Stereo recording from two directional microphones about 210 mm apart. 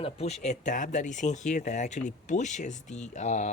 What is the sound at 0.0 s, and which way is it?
Speech, 30° left (ahead or behind).